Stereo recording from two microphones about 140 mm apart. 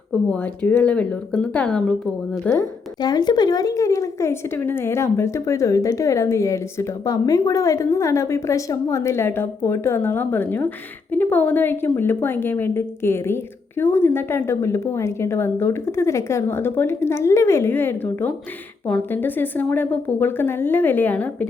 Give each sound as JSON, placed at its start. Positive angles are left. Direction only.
{"t": 0.3, "sound": "a woman's voice", "side_deg": 10}
{"t": 2.6, "sound": "a woman's voice", "side_deg": 30}